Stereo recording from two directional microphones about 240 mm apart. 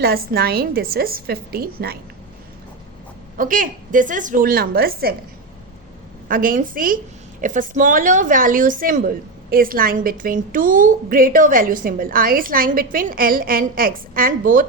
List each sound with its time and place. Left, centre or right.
0.0 s a woman's voice: right
3.3 s a woman's voice: right
6.2 s a woman's voice: right